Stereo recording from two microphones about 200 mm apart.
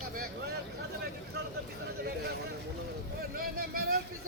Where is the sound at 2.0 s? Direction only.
50° right (ahead or behind).